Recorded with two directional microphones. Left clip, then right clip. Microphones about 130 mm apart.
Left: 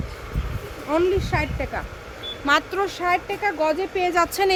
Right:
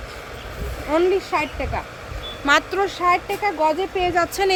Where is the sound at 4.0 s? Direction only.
30° left (ahead or behind).